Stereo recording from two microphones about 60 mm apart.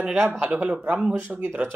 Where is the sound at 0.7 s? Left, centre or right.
Centre.